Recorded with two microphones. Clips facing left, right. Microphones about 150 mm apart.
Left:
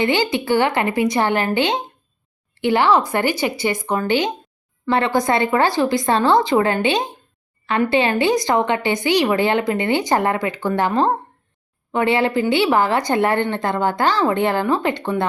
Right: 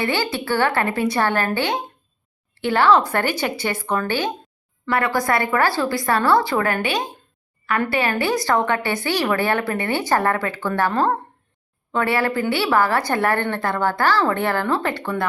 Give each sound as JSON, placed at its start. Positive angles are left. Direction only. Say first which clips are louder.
{"t": 0.0, "sound": "a woman's voice", "louder": "left 4 dB", "side_deg": 20}